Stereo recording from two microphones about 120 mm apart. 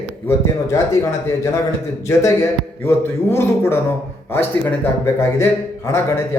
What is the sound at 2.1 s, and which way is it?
Speech, 25° left (ahead or behind).